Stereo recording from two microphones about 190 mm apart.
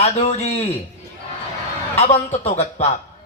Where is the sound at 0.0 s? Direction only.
35° left (ahead or behind).